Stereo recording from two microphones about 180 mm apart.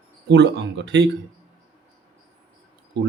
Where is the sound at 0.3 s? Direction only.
75° right (ahead or behind).